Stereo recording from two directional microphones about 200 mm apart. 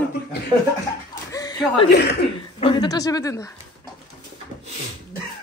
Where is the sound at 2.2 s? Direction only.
25° left (ahead or behind).